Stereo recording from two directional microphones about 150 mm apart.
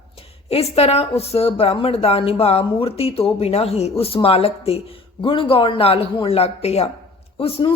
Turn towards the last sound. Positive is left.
turn(degrees=40)  # may be behind; listen again after turning